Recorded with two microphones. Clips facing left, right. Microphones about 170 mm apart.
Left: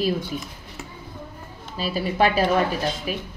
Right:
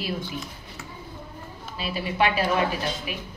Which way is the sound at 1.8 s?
40° left (ahead or behind).